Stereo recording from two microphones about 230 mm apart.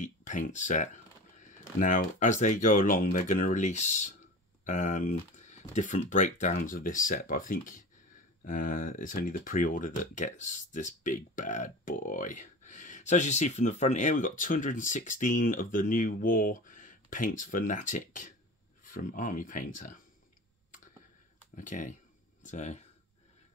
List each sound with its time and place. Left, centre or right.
0.0 s a sound: left
1.8 s speech: left
21.5 s speech: left